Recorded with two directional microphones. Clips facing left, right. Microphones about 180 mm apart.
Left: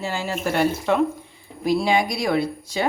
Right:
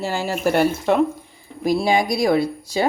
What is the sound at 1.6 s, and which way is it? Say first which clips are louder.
Speech: right 2 dB; 40° right (ahead or behind).